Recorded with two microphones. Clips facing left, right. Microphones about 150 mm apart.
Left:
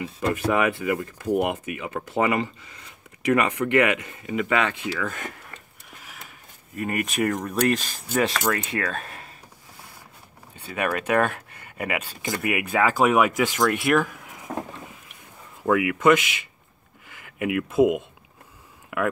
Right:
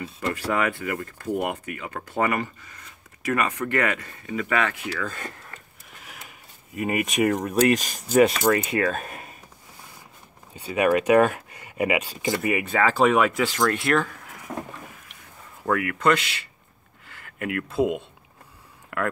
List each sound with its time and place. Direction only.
0.3 s speech: 20° left (ahead or behind)
6.7 s speech: 5° right (ahead or behind)
8.1 s speech: 15° right (ahead or behind)
10.7 s speech: 15° right (ahead or behind)
12.4 s speech: 5° left (ahead or behind)
15.6 s speech: 15° left (ahead or behind)